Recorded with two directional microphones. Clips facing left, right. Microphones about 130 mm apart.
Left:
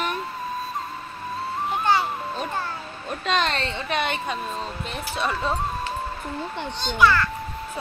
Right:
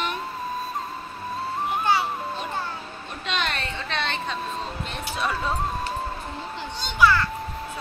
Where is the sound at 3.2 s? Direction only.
40° left (ahead or behind).